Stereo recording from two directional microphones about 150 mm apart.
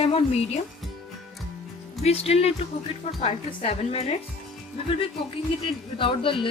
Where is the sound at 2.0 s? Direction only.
45° left (ahead or behind).